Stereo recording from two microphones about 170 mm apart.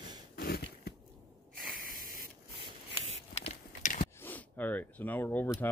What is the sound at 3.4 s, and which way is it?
Clip-clop, 50° left (ahead or behind).